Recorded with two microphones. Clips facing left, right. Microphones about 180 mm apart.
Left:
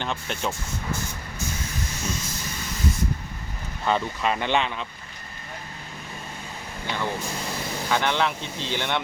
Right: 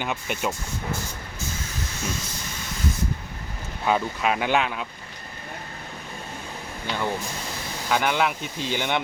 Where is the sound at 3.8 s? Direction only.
5° right (ahead or behind).